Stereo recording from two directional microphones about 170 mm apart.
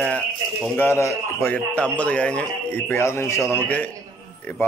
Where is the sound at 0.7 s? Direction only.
15° left (ahead or behind).